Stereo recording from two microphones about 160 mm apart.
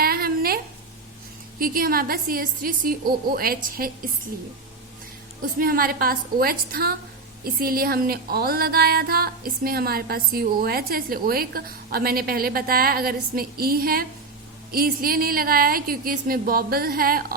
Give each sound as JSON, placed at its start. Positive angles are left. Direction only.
{"t": 0.0, "sound": "a sound", "side_deg": -70}
{"t": 1.5, "sound": "music", "side_deg": -65}
{"t": 5.4, "sound": "music", "side_deg": -65}